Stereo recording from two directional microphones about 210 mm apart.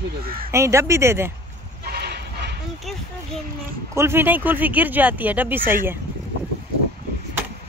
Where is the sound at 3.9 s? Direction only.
10° right (ahead or behind).